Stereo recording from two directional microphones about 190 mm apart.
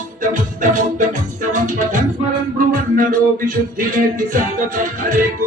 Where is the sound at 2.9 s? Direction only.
45° right (ahead or behind).